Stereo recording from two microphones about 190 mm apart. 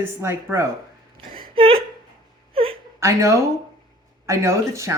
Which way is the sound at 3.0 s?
15° right (ahead or behind).